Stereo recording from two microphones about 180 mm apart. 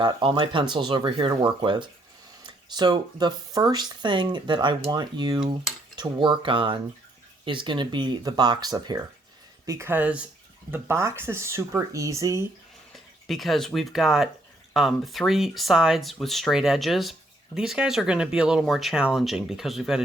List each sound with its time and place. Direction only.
0.0 s speech: 30° right (ahead or behind)
13.2 s speech: centre (ahead or behind)